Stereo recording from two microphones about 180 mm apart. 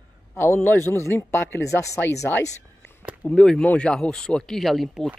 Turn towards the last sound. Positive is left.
turn(degrees=0)  # may be behind; listen again after turning